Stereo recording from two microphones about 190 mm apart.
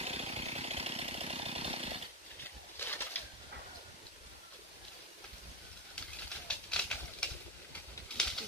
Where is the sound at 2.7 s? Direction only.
10° left (ahead or behind).